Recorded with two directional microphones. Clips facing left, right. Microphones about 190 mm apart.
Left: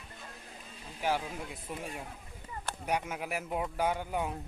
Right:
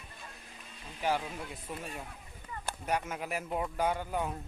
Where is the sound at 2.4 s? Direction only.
25° left (ahead or behind).